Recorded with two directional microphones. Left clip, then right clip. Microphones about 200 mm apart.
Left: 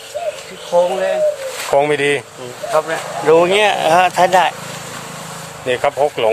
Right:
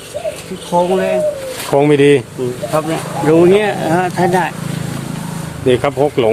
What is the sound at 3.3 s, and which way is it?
Speech, 35° left (ahead or behind).